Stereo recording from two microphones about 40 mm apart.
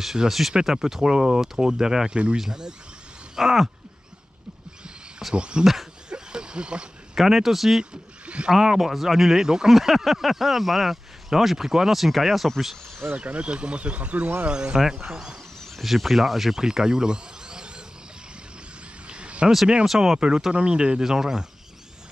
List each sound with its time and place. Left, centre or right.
0.0 s speech: centre
1.1 s speech: centre
5.3 s speech: right
6.0 s a sound: right
7.2 s speech: centre
9.8 s speech: centre
13.1 s speech: right
14.5 s speech: right
14.8 s speech: centre
19.0 s a sound: right
19.9 s speech: centre
20.2 s speech: right